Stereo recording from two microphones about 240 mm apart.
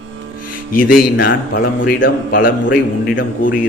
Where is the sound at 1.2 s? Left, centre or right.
Left.